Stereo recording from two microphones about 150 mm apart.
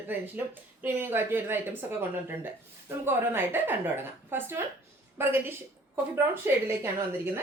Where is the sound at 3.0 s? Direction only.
15° right (ahead or behind).